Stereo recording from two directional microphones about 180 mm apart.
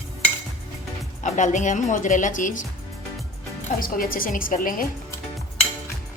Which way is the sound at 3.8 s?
50° left (ahead or behind).